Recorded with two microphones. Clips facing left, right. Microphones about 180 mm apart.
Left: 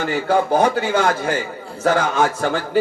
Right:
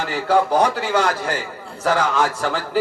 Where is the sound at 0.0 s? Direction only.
50° left (ahead or behind).